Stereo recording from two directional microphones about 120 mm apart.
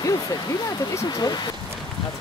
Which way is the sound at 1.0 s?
35° left (ahead or behind).